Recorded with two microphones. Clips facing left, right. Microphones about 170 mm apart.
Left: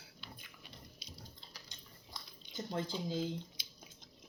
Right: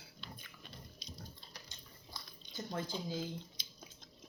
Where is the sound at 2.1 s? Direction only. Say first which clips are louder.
Even; 20° left (ahead or behind).